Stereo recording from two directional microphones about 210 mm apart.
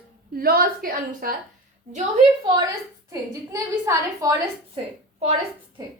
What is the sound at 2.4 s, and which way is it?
A woman's voice, 20° right (ahead or behind).